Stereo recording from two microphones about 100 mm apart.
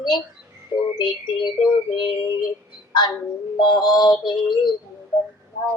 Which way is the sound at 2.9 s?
45° left (ahead or behind).